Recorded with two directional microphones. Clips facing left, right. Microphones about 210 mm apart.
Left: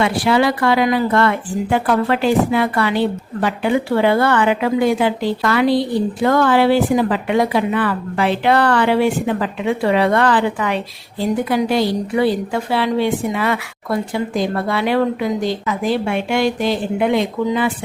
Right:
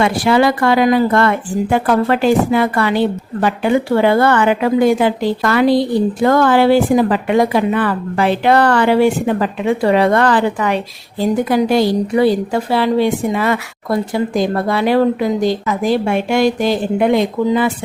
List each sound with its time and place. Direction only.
0.0 s a woman's voice: 45° right (ahead or behind)